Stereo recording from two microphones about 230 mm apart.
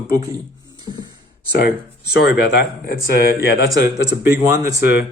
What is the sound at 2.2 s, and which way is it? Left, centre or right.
Speech, left.